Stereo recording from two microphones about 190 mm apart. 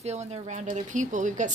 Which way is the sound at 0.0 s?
35° right (ahead or behind).